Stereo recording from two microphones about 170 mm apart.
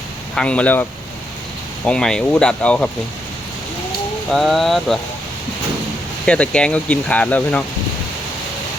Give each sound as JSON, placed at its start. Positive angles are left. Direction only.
{"t": 0.3, "sound": "speech", "side_deg": 5}
{"t": 4.3, "sound": "speech", "side_deg": 0}
{"t": 6.2, "sound": "speech", "side_deg": 5}